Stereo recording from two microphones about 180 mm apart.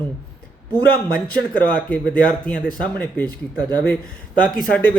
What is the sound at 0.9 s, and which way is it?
Speech, 10° left (ahead or behind).